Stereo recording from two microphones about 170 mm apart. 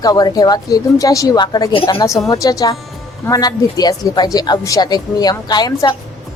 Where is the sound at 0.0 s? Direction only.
20° left (ahead or behind).